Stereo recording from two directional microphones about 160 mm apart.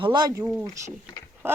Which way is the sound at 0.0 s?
30° right (ahead or behind).